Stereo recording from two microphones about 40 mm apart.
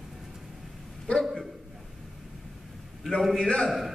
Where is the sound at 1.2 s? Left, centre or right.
Centre.